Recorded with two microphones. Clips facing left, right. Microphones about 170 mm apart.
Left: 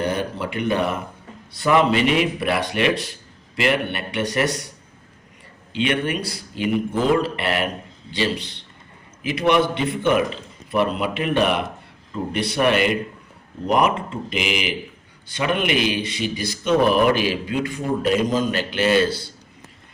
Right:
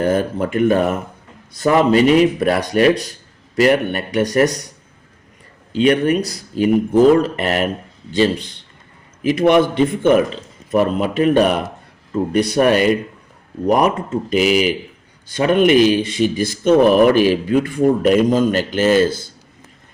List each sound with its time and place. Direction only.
0.0 s speech: 45° right (ahead or behind)
5.7 s speech: 40° right (ahead or behind)